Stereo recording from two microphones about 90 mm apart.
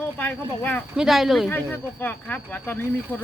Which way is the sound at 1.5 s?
20° left (ahead or behind).